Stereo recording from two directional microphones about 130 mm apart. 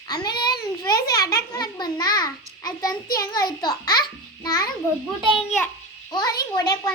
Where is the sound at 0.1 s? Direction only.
30° left (ahead or behind).